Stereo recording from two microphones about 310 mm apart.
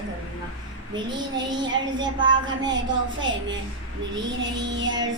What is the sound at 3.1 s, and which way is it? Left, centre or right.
Child singing, right.